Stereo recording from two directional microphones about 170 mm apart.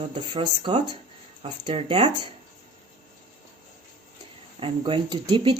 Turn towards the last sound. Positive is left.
turn(degrees=-30)  # may be behind; listen again after turning